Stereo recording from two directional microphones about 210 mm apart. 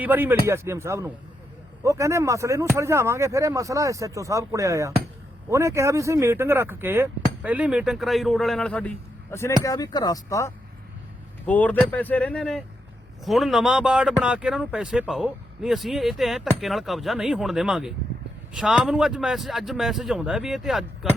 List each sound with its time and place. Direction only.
0.0 s speech: 10° right (ahead or behind)